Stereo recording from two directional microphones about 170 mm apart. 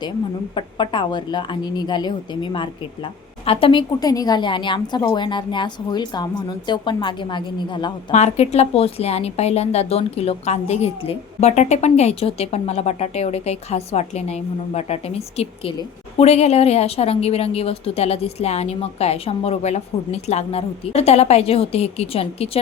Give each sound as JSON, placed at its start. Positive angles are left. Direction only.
{"t": 0.5, "sound": "a woman's voice", "side_deg": 30}
{"t": 8.1, "sound": "a woman's voice", "side_deg": 40}